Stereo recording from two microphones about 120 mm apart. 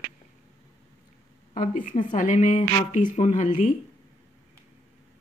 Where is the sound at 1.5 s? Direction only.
90° left.